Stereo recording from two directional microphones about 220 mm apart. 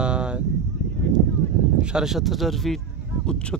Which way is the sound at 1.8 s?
5° right (ahead or behind).